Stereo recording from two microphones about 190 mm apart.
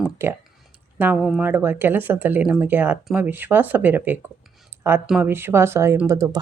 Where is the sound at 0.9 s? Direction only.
5° right (ahead or behind).